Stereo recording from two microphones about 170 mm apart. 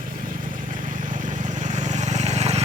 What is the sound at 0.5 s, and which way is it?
Vehicle, 50° right (ahead or behind).